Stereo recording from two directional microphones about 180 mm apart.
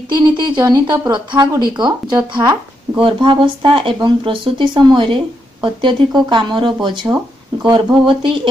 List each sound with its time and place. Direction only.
0.1 s speech: 25° right (ahead or behind)